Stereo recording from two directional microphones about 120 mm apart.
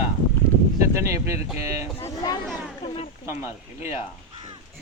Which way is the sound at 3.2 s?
20° right (ahead or behind).